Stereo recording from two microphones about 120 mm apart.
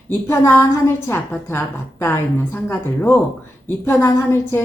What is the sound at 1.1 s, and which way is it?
A woman's voice, 20° left (ahead or behind).